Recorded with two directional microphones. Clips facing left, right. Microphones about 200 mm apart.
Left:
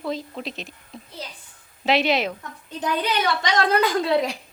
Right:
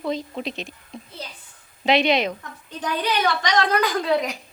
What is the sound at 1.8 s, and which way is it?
Speech, 5° left (ahead or behind).